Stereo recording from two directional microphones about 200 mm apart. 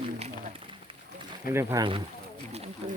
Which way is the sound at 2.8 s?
30° right (ahead or behind).